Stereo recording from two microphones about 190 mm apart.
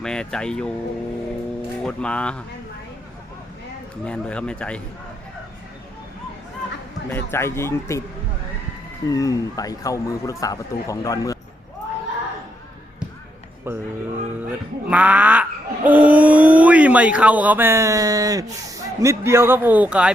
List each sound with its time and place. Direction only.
0.0 s speech: 5° left (ahead or behind)
1.8 s speech: 5° left (ahead or behind)
4.0 s speech: 5° left (ahead or behind)
7.1 s speech: 10° left (ahead or behind)
9.1 s speech: 20° left (ahead or behind)
13.7 s speech: 10° right (ahead or behind)
14.8 s a sound: 5° right (ahead or behind)
18.9 s a man's voice: 15° right (ahead or behind)